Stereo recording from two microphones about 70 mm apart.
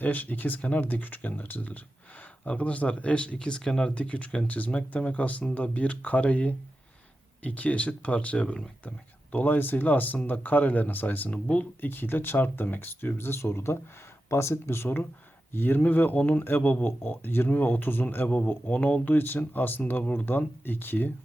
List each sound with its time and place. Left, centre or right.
0.0 s speech: left